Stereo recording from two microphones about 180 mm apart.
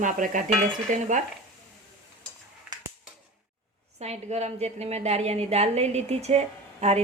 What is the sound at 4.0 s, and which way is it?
A woman's voice, 35° right (ahead or behind).